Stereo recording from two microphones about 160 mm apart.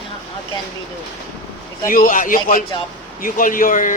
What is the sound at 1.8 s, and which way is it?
Speech, 60° left (ahead or behind).